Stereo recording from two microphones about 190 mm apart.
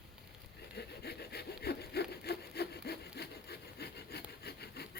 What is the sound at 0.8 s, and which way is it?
Sawing, 55° left (ahead or behind).